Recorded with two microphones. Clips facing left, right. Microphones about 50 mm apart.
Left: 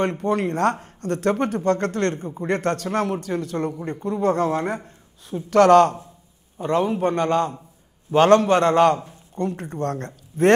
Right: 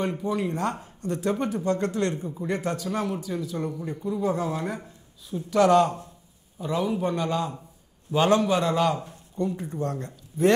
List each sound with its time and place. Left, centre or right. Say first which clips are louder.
0.0 s speech: left 5 dB; left